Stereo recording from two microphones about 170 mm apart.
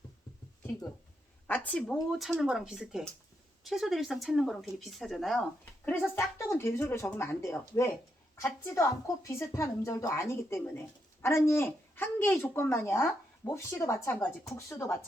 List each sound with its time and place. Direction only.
1.5 s speech: 10° left (ahead or behind)
6.1 s a woman's voice: 15° left (ahead or behind)